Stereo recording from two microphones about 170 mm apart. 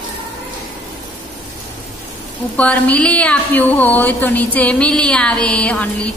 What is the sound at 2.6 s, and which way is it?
A woman's voice, 10° left (ahead or behind).